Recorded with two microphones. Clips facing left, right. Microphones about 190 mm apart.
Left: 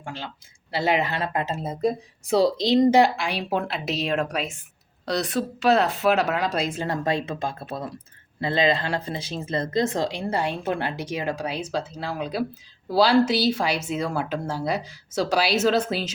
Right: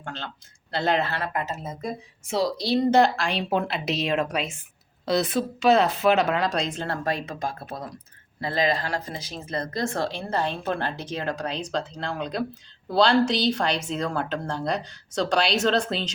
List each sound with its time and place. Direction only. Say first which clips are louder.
0.0 s speech: left 1 dB; 10° left (ahead or behind); by 2.5 s 35° left (ahead or behind)
2.6 s speech: even; 20° left (ahead or behind)